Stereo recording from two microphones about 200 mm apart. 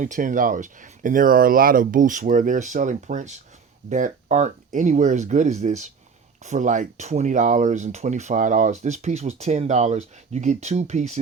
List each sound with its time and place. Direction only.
0.0 s speech: 40° right (ahead or behind)